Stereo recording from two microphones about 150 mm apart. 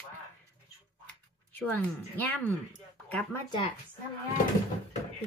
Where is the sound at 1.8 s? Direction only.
10° left (ahead or behind).